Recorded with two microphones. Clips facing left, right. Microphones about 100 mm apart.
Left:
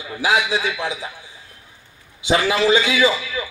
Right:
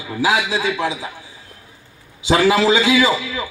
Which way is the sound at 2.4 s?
20° right (ahead or behind).